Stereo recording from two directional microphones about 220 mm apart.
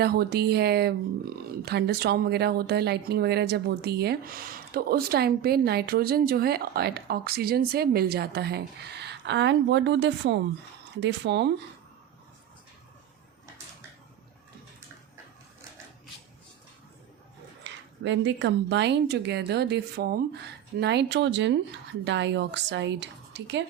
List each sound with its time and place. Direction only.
0.0 s a woman's voice: 45° right (ahead or behind)
17.6 s a woman's voice: 55° right (ahead or behind)